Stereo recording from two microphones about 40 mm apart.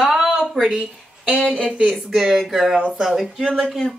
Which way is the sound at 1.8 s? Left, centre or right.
Centre.